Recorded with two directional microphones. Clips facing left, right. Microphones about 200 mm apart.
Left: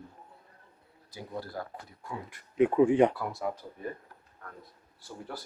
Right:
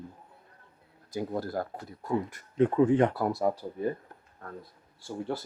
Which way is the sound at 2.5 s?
10° left (ahead or behind).